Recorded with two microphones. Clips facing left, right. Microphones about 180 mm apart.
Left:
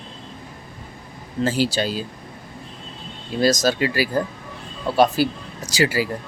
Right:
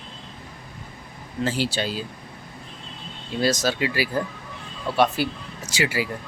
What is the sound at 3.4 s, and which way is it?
Speech, 40° left (ahead or behind).